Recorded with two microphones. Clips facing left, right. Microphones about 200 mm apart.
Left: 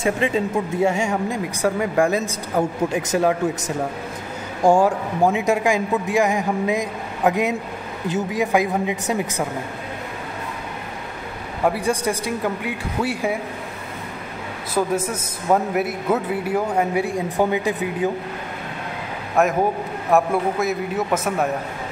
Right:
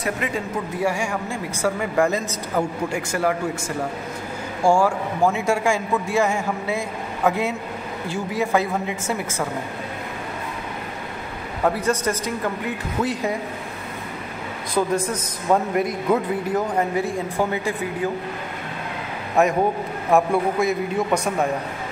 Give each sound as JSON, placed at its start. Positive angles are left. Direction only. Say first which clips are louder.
{"t": 0.0, "sound": "a man's voice", "louder": "left 5 dB", "side_deg": 25}
{"t": 11.6, "sound": "a man's voice", "louder": "left 1 dB", "side_deg": 10}
{"t": 14.7, "sound": "a man's voice", "louder": "even", "side_deg": 5}
{"t": 19.4, "sound": "a man's voice", "louder": "even", "side_deg": 0}